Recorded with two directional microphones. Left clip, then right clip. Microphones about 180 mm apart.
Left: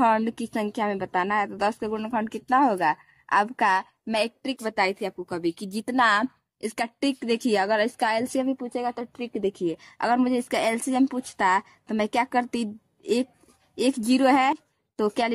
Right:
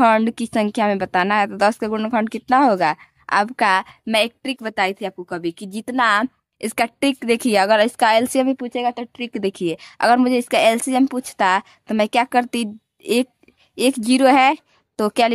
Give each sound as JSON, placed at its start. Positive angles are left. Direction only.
{"t": 0.0, "sound": "a woman's voice", "side_deg": -25}
{"t": 6.6, "sound": "a woman's voice", "side_deg": -35}